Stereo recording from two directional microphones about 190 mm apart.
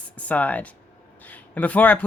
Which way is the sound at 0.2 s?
10° left (ahead or behind).